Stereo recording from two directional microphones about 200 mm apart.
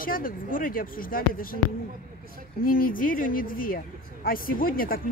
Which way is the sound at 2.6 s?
45° left (ahead or behind).